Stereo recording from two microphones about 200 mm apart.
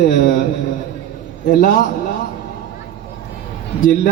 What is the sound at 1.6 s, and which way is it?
Speech, 40° left (ahead or behind).